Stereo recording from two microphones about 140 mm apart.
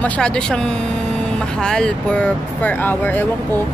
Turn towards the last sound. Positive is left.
turn(degrees=15)  # may be behind; listen again after turning